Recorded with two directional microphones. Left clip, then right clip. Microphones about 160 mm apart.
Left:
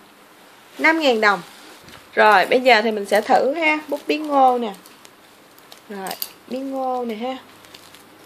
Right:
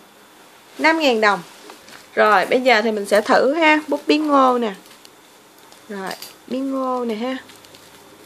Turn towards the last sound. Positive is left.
turn(degrees=-25)  # may be behind; listen again after turning